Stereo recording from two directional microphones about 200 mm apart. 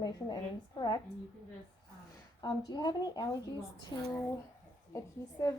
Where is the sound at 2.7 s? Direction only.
20° left (ahead or behind).